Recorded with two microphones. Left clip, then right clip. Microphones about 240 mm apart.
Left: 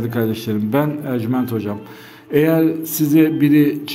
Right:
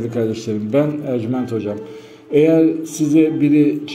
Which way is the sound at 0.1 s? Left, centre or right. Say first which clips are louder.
Right 1 dB; left.